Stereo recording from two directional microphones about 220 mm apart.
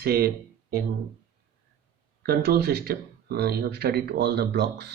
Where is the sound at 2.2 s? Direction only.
45° right (ahead or behind).